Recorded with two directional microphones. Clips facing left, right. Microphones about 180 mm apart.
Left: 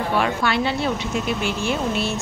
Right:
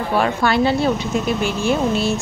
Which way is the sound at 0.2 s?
40° right (ahead or behind).